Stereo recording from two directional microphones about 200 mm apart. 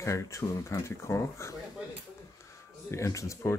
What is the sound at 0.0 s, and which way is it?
Speech, 15° left (ahead or behind).